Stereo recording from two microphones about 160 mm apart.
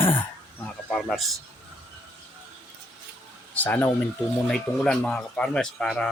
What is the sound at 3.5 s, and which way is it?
Speech, 10° left (ahead or behind).